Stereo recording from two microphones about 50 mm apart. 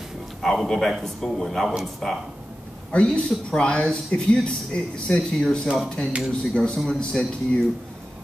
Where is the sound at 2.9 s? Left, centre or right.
Left.